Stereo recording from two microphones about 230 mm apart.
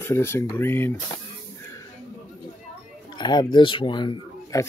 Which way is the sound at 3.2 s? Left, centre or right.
Centre.